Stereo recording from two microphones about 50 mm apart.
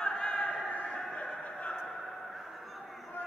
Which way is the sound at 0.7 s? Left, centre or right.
Left.